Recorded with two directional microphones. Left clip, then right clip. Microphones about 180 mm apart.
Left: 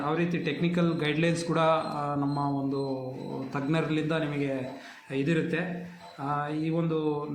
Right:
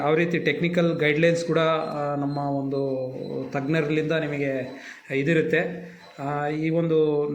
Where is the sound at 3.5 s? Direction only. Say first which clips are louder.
Right 5 dB; 15° right (ahead or behind).